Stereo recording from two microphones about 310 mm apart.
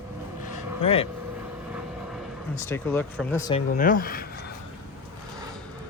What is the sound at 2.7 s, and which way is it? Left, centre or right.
Speech, centre.